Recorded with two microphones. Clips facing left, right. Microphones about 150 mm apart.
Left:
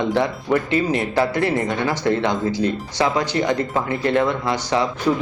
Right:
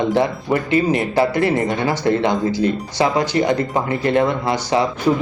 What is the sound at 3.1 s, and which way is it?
Speech, 15° right (ahead or behind).